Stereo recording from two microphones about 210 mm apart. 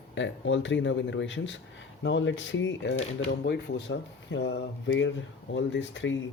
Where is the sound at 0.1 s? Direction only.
60° left (ahead or behind).